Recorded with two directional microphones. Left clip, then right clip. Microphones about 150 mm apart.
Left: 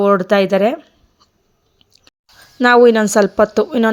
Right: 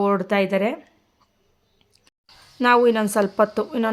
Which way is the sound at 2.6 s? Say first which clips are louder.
Left 7 dB; 40° left (ahead or behind).